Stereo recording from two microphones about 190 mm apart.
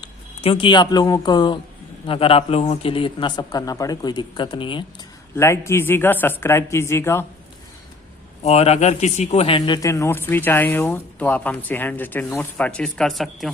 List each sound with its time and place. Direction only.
0.4 s speech: 25° left (ahead or behind)
5.4 s speech: 15° left (ahead or behind)
8.4 s speech: 35° left (ahead or behind); by 13.5 s centre (ahead or behind)